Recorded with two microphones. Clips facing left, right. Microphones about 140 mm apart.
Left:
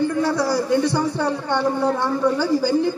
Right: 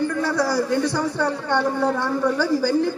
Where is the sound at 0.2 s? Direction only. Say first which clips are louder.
Left 1 dB; 15° left (ahead or behind).